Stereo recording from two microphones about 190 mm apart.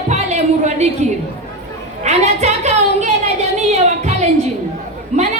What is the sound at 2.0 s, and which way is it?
Speech, 35° right (ahead or behind).